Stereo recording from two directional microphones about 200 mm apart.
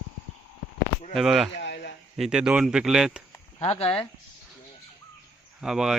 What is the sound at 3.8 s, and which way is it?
Speech, 10° left (ahead or behind).